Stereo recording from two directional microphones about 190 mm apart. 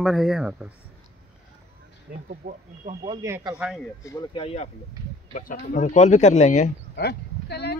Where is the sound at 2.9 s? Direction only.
35° right (ahead or behind).